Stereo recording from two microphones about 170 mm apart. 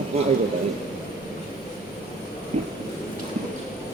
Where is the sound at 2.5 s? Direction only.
45° right (ahead or behind).